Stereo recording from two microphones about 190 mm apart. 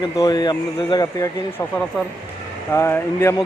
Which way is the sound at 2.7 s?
15° left (ahead or behind).